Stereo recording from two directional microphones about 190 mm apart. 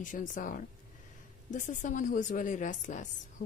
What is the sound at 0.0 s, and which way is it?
A woman's voice, 45° left (ahead or behind).